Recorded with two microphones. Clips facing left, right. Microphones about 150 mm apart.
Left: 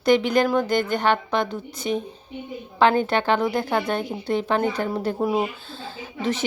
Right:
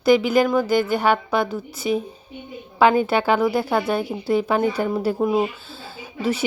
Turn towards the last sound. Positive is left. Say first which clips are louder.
# right 2 dB
turn(degrees=-10)  # may be behind; listen again after turning